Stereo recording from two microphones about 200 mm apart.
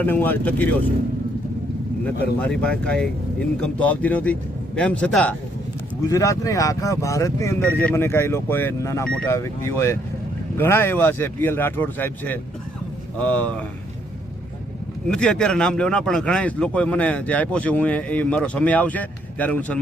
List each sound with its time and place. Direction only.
0.0 s speech: 10° left (ahead or behind)
2.4 s speech: 5° left (ahead or behind)
6.1 s speech: 15° left (ahead or behind)
15.0 s speech: 5° left (ahead or behind)